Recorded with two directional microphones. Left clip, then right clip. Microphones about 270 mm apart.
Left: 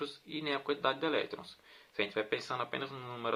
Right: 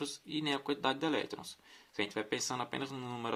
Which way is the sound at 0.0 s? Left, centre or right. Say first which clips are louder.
Right 1 dB; right.